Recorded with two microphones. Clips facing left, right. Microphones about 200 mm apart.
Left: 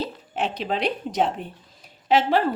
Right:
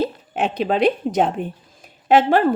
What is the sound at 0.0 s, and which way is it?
Speech, 50° right (ahead or behind).